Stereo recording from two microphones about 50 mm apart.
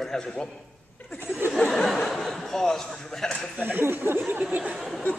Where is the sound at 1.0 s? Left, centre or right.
Left.